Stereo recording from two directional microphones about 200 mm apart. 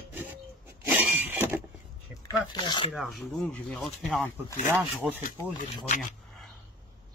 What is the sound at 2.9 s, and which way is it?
Speech, centre (ahead or behind).